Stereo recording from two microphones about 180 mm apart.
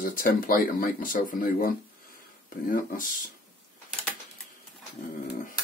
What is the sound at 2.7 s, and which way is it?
Speech, 50° left (ahead or behind).